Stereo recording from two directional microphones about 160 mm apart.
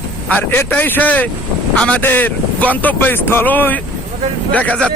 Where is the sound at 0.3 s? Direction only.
10° left (ahead or behind).